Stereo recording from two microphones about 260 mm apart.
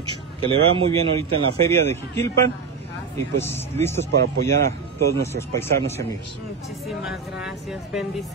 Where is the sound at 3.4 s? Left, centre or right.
Centre.